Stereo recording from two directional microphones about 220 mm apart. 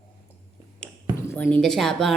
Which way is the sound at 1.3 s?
5° left (ahead or behind).